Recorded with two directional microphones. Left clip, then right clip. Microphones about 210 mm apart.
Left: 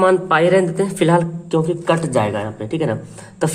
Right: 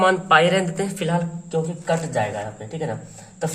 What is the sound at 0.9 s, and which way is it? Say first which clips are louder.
Speech: left 11 dB; 30° left (ahead or behind).